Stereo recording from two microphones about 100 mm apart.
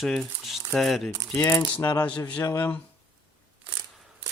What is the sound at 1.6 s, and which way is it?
Speech, 20° left (ahead or behind).